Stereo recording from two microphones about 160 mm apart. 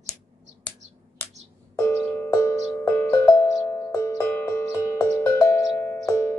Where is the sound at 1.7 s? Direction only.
15° left (ahead or behind).